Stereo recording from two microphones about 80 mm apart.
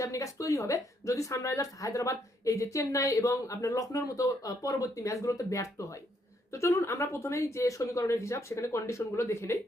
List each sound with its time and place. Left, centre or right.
0.0 s a woman's voice: left